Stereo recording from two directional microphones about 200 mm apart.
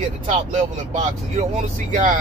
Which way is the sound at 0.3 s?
35° right (ahead or behind).